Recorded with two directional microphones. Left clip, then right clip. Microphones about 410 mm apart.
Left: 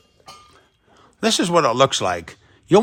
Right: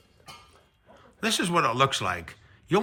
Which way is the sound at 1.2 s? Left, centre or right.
Centre.